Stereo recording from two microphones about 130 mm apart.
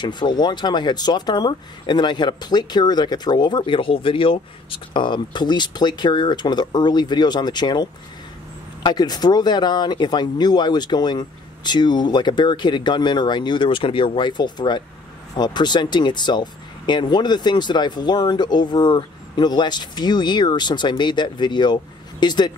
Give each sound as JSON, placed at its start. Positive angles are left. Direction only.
{"t": 0.0, "sound": "speech", "side_deg": 35}